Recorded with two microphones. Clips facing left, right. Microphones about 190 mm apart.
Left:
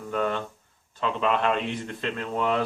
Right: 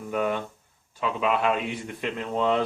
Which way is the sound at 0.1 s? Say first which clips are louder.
Right 1 dB; 10° right (ahead or behind).